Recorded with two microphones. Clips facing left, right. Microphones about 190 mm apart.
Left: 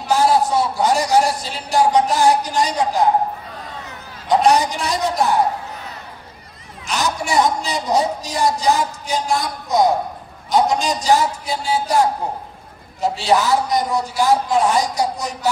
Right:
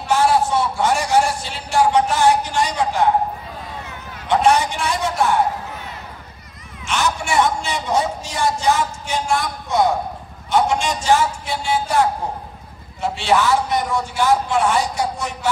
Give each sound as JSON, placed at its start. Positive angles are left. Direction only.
{"t": 0.4, "sound": "a man's voice", "side_deg": 35}
{"t": 4.3, "sound": "a man's voice", "side_deg": 40}
{"t": 6.9, "sound": "a man's voice", "side_deg": 40}
{"t": 13.0, "sound": "a man's voice", "side_deg": 40}